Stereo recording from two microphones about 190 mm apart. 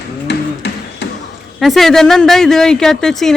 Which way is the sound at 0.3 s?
60° left (ahead or behind).